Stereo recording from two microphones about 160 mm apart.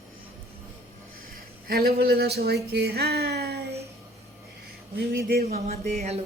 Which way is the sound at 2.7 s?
90° right.